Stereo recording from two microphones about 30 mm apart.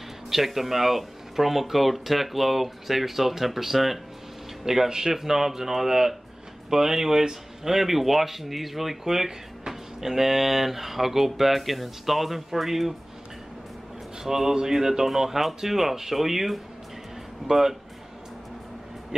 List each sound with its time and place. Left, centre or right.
0.3 s speech: centre
4.6 s speech: centre
14.2 s speech: centre